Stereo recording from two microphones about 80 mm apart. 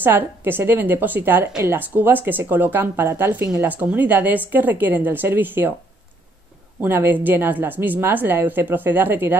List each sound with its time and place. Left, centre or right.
0.0 s a woman's voice: right
6.8 s a woman's voice: right